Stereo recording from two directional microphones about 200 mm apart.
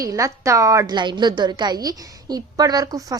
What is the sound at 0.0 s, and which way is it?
A woman's voice, 15° right (ahead or behind).